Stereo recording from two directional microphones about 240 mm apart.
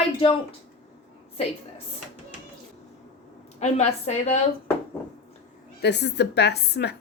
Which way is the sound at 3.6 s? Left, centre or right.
Left.